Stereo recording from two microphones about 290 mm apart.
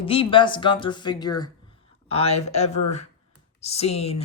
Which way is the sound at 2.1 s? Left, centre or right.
Left.